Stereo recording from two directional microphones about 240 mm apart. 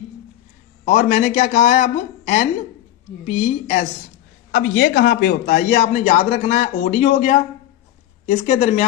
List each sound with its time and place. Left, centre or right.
0.9 s a man's voice: left